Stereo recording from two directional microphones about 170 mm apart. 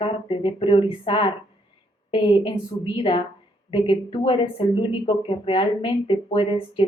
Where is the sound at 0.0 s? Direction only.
30° left (ahead or behind).